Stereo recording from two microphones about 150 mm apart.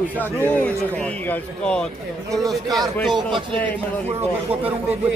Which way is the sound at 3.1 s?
35° right (ahead or behind).